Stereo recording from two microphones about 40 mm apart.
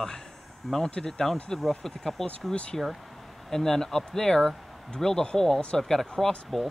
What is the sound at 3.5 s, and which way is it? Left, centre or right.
Speech, centre.